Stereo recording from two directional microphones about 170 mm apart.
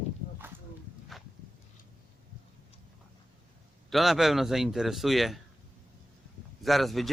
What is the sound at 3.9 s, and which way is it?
Speech, centre (ahead or behind).